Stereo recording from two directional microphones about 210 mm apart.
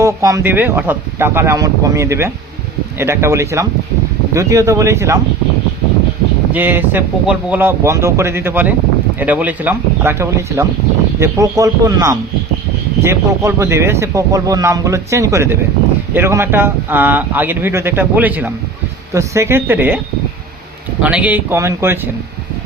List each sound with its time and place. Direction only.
0.0 s speech: 15° right (ahead or behind)
6.5 s speech: 10° right (ahead or behind)
21.0 s speech: 5° right (ahead or behind)